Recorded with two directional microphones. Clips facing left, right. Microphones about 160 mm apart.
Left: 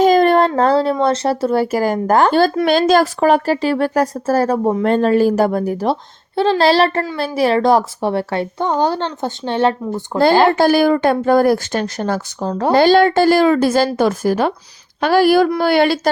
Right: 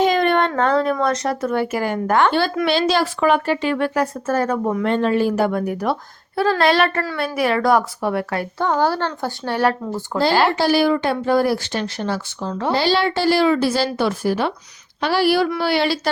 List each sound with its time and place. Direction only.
0.0 s a woman's voice: 40° left (ahead or behind); by 10.2 s 20° left (ahead or behind)
10.5 s speech: 50° left (ahead or behind)
12.7 s speech: 50° left (ahead or behind)